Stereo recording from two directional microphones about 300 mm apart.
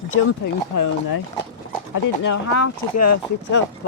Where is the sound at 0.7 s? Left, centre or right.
Left.